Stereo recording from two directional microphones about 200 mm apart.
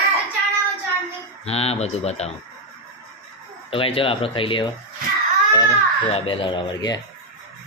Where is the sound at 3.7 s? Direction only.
30° left (ahead or behind).